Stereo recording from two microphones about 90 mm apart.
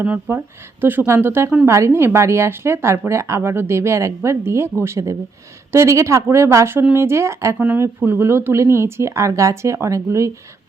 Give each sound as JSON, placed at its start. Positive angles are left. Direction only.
{"t": 0.0, "sound": "a woman's voice", "side_deg": -20}